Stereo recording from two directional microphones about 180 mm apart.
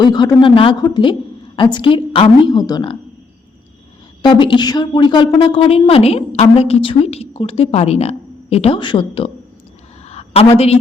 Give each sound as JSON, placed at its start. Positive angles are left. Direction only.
{"t": 0.0, "sound": "a woman's voice", "side_deg": 25}
{"t": 4.2, "sound": "speech", "side_deg": 25}
{"t": 10.1, "sound": "a sound", "side_deg": 35}